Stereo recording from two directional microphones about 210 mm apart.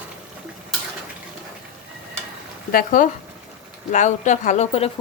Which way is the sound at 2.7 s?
40° left (ahead or behind).